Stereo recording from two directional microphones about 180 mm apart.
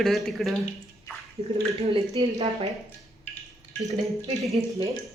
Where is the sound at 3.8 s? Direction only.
20° right (ahead or behind).